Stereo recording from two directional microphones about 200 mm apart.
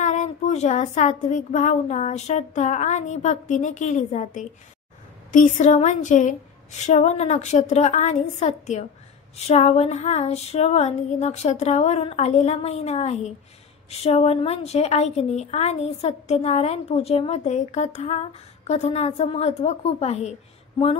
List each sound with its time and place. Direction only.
0.0 s a woman's voice: 40° left (ahead or behind)